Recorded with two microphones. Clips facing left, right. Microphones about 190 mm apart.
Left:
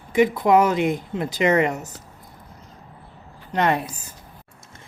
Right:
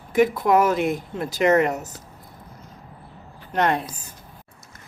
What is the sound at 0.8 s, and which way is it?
Speech, centre (ahead or behind).